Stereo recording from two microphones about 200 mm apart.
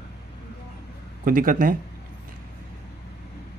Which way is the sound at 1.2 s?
45° right (ahead or behind).